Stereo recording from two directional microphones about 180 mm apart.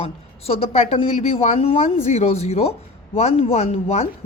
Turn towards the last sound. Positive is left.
turn(degrees=35)  # may be behind; listen again after turning